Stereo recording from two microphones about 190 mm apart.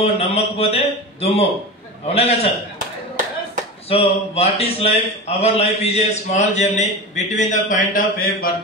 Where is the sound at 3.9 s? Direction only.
30° left (ahead or behind).